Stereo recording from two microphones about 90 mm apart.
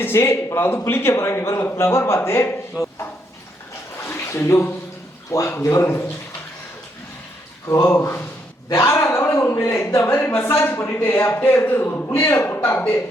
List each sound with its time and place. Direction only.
0.0 s a man's voice: 30° left (ahead or behind)
3.9 s a sound: 30° left (ahead or behind)
5.5 s a man's voice: 30° left (ahead or behind)
7.7 s a man's voice: 30° left (ahead or behind)